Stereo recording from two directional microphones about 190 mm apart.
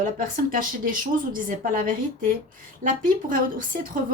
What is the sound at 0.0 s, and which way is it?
A woman's voice, 45° right (ahead or behind).